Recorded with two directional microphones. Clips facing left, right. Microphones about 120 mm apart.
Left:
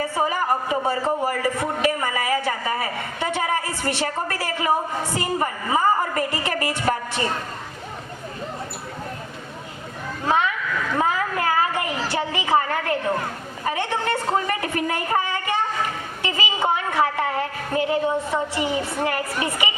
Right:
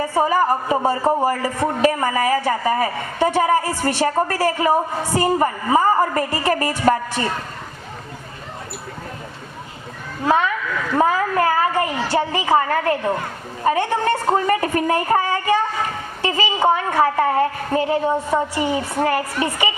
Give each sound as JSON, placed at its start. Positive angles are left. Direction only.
{"t": 0.0, "sound": "speech", "side_deg": -40}
{"t": 10.2, "sound": "speech", "side_deg": -45}
{"t": 10.9, "sound": "a sound", "side_deg": -40}
{"t": 13.7, "sound": "speech", "side_deg": -40}